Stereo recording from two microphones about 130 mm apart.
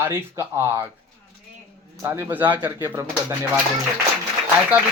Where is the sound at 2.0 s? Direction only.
20° right (ahead or behind).